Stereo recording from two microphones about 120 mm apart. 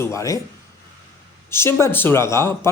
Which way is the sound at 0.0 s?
25° left (ahead or behind).